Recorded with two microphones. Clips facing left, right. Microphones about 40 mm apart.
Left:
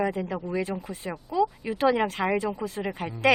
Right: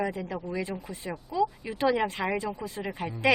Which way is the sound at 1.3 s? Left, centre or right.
Centre.